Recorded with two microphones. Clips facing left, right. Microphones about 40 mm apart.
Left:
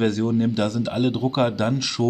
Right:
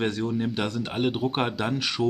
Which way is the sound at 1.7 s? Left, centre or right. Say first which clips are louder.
Left 2 dB; right.